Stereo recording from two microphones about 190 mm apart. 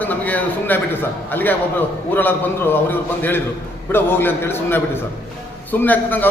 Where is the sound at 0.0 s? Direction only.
10° left (ahead or behind).